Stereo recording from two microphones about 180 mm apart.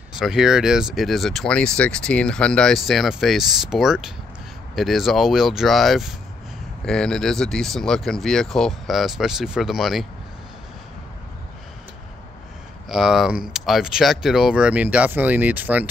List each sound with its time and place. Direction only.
0.1 s speech: 5° right (ahead or behind)
12.8 s speech: centre (ahead or behind)